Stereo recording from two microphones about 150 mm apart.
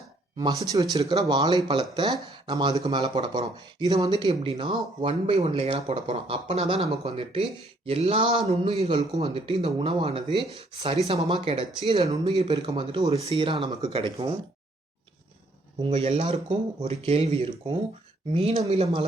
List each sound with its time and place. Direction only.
0.3 s speech: 25° right (ahead or behind); by 11.2 s 40° right (ahead or behind)
11.2 s speech: 30° right (ahead or behind)
15.8 s speech: 35° right (ahead or behind)